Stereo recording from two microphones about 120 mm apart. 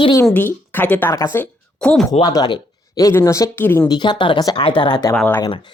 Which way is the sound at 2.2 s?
35° left (ahead or behind).